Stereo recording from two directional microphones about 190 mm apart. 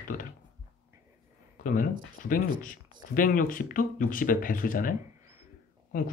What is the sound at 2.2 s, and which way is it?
Speech, 45° left (ahead or behind).